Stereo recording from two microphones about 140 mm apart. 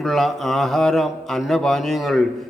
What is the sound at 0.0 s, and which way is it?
A man's voice, centre (ahead or behind).